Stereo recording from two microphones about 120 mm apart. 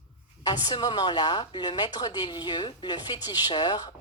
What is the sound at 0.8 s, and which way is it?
A woman's voice, 35° left (ahead or behind).